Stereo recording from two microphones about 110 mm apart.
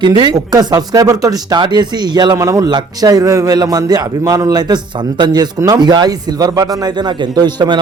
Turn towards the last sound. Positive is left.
turn(degrees=-40)  # may be behind; listen again after turning